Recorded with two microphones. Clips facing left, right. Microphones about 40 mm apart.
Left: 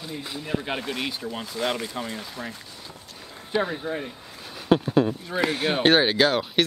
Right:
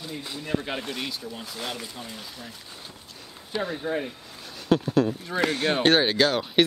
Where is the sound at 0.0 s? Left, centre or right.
Centre.